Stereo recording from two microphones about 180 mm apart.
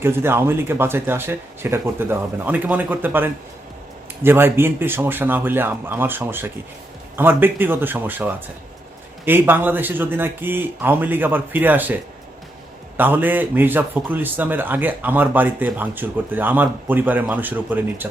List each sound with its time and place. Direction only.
0.0 s a man's voice: 15° right (ahead or behind)
13.0 s a man's voice: 10° right (ahead or behind)